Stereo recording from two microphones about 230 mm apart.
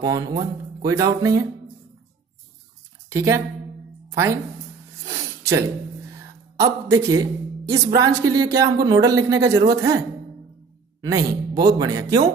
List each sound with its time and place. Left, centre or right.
0.0 s speech: centre
3.1 s speech: centre
5.0 s a sound: centre
6.6 s a man's voice: centre
11.0 s speech: centre